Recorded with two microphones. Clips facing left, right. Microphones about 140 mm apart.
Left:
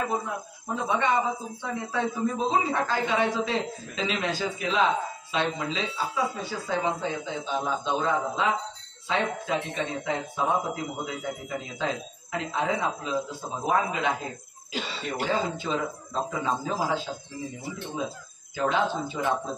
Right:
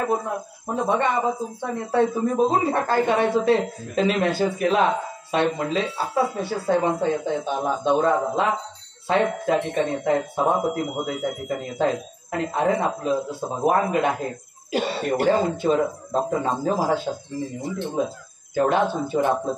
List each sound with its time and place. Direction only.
0.7 s speech: 50° right (ahead or behind)